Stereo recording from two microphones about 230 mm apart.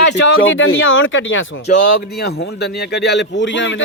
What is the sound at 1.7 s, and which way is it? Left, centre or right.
A man's voice, left.